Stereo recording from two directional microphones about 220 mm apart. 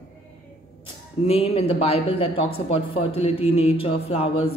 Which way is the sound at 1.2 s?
25° left (ahead or behind).